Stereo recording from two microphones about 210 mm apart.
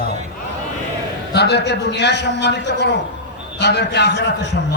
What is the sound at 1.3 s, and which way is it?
A man's voice, 50° left (ahead or behind).